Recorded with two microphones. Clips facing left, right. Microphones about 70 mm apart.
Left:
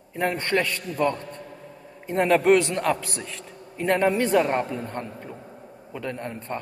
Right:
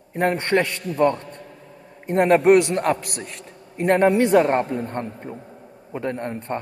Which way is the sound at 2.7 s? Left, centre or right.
Right.